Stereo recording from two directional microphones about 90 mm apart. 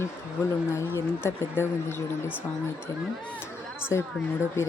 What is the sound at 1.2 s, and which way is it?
Speech, 25° left (ahead or behind).